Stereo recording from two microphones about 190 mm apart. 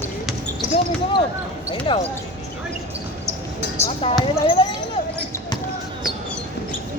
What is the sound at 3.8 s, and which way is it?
Speech, 30° left (ahead or behind).